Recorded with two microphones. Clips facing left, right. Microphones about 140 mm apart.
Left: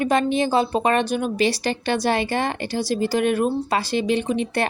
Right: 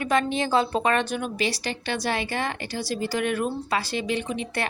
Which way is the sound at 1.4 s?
30° left (ahead or behind).